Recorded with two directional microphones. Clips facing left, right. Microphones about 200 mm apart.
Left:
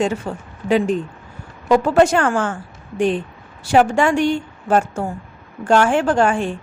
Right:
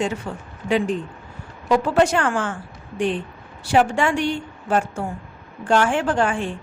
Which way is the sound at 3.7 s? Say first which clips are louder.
Left 4 dB; 45° left (ahead or behind).